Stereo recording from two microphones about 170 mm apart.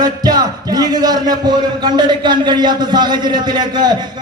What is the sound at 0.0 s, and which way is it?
A man's voice, 25° right (ahead or behind).